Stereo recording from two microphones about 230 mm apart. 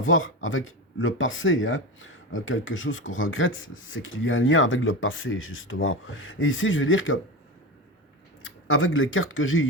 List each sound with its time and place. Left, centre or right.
0.0 s speech: left
8.4 s speech: left